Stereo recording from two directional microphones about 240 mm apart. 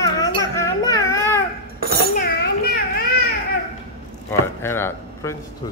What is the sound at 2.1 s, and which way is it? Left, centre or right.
Children playing, left.